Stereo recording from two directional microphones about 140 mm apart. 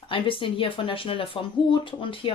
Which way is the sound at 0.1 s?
40° left (ahead or behind).